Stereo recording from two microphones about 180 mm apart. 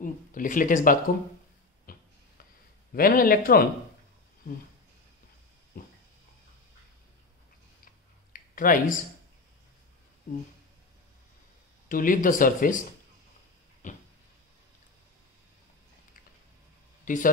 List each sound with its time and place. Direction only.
0.0 s speech: 50° left (ahead or behind)
1.9 s a sound: 55° left (ahead or behind)
2.9 s speech: 55° left (ahead or behind)
7.8 s clicking: 50° left (ahead or behind)
11.9 s speech: 50° left (ahead or behind)
13.8 s a sound: 45° left (ahead or behind)
17.0 s speech: 45° left (ahead or behind)